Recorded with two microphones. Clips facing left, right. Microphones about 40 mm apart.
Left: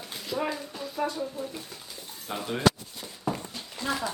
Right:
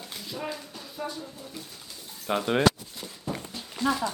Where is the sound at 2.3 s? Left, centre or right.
Right.